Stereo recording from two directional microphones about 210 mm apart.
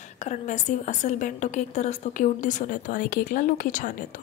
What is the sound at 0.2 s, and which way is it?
A woman's voice, 35° left (ahead or behind).